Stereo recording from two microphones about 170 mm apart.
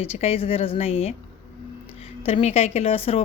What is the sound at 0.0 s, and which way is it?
A woman's voice, 35° left (ahead or behind).